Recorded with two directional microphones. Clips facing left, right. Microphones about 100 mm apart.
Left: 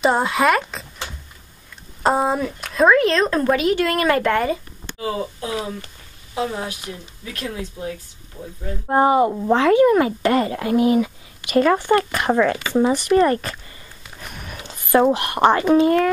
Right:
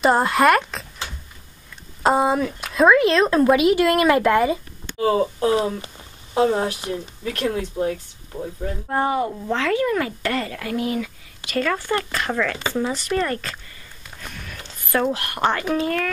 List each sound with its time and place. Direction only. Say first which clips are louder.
0.0 s a sound: right 1 dB; centre (ahead or behind)
2.0 s speech: right 1 dB; centre (ahead or behind)
5.0 s speech: right 7 dB; 45° right (ahead or behind)
8.8 s speech: left 7 dB; 25° left (ahead or behind)
14.3 s a sound: left 2 dB; 15° left (ahead or behind)
15.1 s speech: left 6 dB; 20° left (ahead or behind)